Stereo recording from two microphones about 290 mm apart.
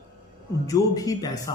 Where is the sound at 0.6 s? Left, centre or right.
Centre.